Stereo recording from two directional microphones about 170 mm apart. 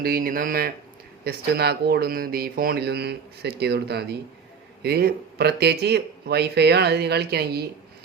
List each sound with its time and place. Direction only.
0.0 s speech: 55° right (ahead or behind)